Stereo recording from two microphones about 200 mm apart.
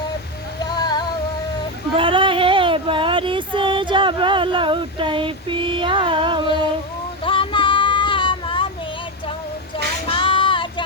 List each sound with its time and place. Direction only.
0.6 s music: 20° left (ahead or behind)
2.0 s a sound: 25° right (ahead or behind)
7.3 s child singing: 25° left (ahead or behind)
10.1 s child singing: 25° left (ahead or behind)